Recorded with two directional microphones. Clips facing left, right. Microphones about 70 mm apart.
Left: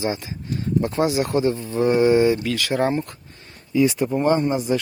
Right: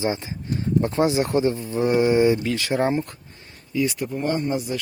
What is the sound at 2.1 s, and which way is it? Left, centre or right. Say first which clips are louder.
Speech: left 1 dB; right.